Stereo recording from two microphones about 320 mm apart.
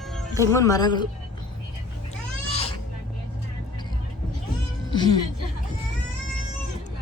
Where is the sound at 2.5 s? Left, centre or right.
Centre.